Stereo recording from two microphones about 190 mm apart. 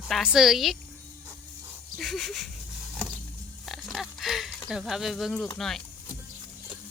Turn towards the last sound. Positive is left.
turn(degrees=0)  # may be behind; listen again after turning